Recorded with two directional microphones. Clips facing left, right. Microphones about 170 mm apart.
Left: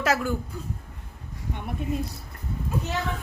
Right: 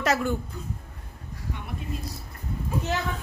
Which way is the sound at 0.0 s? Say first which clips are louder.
Even; 5° left (ahead or behind).